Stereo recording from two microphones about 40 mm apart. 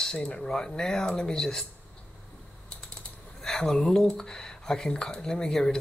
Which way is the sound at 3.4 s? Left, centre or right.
Centre.